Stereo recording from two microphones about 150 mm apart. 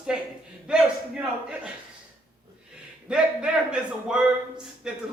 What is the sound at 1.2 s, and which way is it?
Speech, 5° right (ahead or behind).